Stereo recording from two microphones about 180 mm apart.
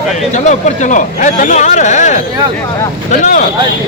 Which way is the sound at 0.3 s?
40° left (ahead or behind).